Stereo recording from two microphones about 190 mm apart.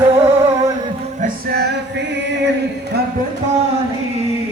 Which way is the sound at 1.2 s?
55° right (ahead or behind).